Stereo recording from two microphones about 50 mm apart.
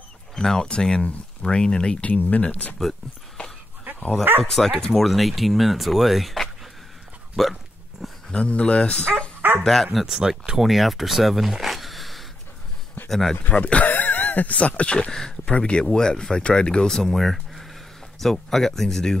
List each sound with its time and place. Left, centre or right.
0.4 s speech: centre; by 2.7 s left
4.5 s speech: centre
5.0 s speech: centre
8.3 s speech: left
9.6 s speech: centre
10.0 s speech: centre
10.6 s speech: centre
13.4 s speech: left
15.0 s speech: centre